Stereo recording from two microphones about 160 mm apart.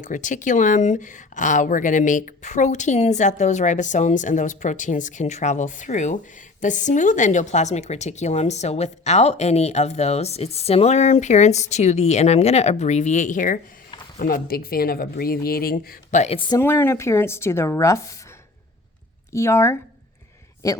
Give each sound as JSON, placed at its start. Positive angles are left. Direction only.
{"t": 0.0, "sound": "speech", "side_deg": 50}
{"t": 14.2, "sound": "speech", "side_deg": 65}
{"t": 16.2, "sound": "a woman's voice", "side_deg": 35}
{"t": 16.6, "sound": "speech", "side_deg": 15}
{"t": 19.3, "sound": "a man's voice", "side_deg": 15}